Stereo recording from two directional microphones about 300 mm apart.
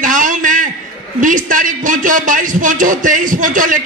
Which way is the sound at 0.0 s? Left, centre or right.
Right.